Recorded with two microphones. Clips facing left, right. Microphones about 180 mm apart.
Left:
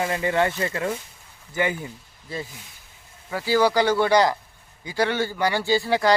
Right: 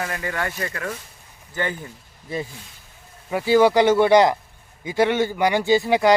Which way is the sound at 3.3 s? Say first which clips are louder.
Right 4 dB; 20° right (ahead or behind).